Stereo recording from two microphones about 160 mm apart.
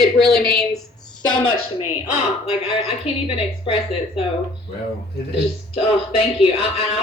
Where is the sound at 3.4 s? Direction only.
35° left (ahead or behind).